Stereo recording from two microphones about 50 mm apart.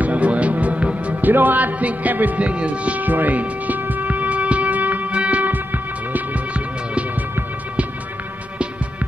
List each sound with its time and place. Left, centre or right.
0.0 s music: right